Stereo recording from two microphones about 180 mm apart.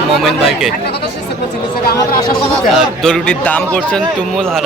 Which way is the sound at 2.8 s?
5° left (ahead or behind).